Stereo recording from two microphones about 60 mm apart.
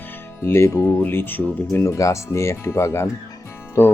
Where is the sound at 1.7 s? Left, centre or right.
Left.